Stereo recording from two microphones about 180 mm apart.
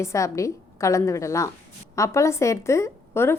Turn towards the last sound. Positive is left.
turn(degrees=15)  # may be behind; listen again after turning